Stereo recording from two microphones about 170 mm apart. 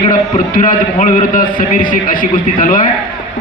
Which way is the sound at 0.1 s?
50° left (ahead or behind).